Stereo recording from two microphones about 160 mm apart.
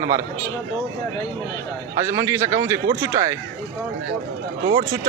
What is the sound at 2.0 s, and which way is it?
A man's voice, 20° right (ahead or behind).